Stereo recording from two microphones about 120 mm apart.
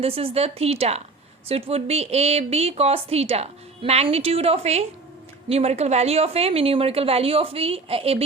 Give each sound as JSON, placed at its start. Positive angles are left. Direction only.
{"t": 0.0, "sound": "a woman's voice", "side_deg": -50}